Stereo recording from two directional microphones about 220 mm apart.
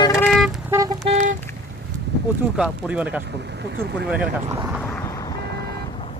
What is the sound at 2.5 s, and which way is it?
Speech, 5° right (ahead or behind).